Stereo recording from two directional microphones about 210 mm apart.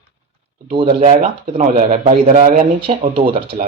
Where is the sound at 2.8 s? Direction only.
25° right (ahead or behind).